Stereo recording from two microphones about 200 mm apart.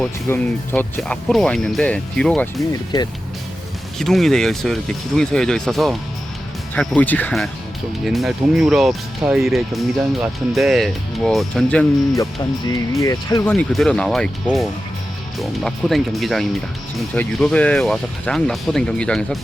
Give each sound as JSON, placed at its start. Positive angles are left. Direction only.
{"t": 0.0, "sound": "speech", "side_deg": 10}
{"t": 3.9, "sound": "speech", "side_deg": 0}
{"t": 12.1, "sound": "speech", "side_deg": 15}
{"t": 13.4, "sound": "speech", "side_deg": 5}